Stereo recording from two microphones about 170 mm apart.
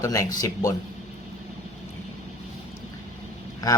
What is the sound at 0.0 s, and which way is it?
Speech, 20° left (ahead or behind).